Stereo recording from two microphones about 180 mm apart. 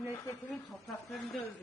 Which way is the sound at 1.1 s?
Centre (ahead or behind).